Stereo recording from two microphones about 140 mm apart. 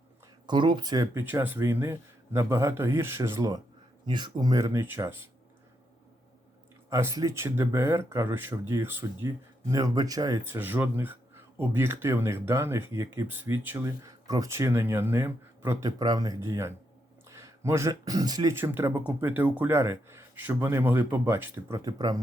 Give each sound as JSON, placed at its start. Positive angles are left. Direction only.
{"t": 0.4, "sound": "speech", "side_deg": -35}
{"t": 1.2, "sound": "speech", "side_deg": -15}
{"t": 4.0, "sound": "speech", "side_deg": -30}
{"t": 6.9, "sound": "speech", "side_deg": -25}
{"t": 10.4, "sound": "speech", "side_deg": -15}